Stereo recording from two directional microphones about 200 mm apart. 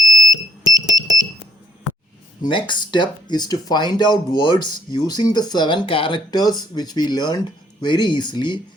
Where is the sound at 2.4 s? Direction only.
25° left (ahead or behind).